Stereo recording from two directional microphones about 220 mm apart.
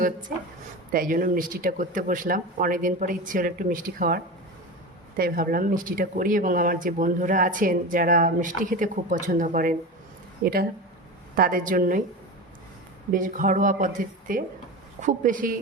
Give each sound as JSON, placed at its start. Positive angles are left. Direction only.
{"t": 0.9, "sound": "speech", "side_deg": -40}
{"t": 13.1, "sound": "speech", "side_deg": -35}